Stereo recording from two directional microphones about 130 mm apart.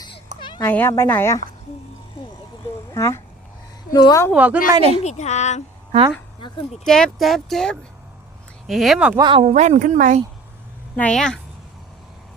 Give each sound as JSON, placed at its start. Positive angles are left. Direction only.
{"t": 0.3, "sound": "children playing", "side_deg": 40}
{"t": 0.6, "sound": "speech", "side_deg": 15}
{"t": 2.9, "sound": "speech", "side_deg": 20}
{"t": 3.9, "sound": "a woman's voice", "side_deg": 35}
{"t": 4.4, "sound": "a woman's voice", "side_deg": -10}
{"t": 4.8, "sound": "a woman's voice", "side_deg": -50}
{"t": 5.0, "sound": "a woman's voice", "side_deg": 60}
{"t": 6.8, "sound": "speech", "side_deg": 5}
{"t": 9.1, "sound": "speech", "side_deg": -40}
{"t": 9.5, "sound": "speech", "side_deg": -65}
{"t": 10.9, "sound": "speech", "side_deg": 5}